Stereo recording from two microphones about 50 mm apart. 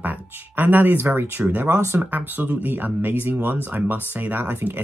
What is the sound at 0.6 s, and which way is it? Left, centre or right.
Speech, right.